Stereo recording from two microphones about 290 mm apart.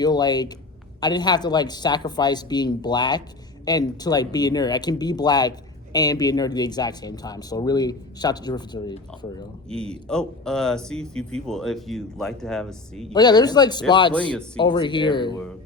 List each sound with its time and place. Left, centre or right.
0.0 s speech: centre
9.6 s speech: centre
13.1 s speech: centre
14.1 s speech: centre
14.6 s speech: centre